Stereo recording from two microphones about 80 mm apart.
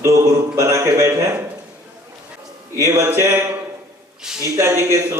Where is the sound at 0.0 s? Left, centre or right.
Right.